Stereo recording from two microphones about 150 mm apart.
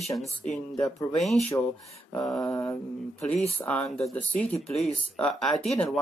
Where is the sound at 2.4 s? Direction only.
20° left (ahead or behind).